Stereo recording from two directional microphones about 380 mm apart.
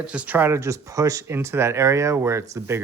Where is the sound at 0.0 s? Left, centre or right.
Centre.